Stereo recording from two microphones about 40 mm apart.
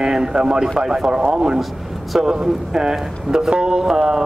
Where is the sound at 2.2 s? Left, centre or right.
Centre.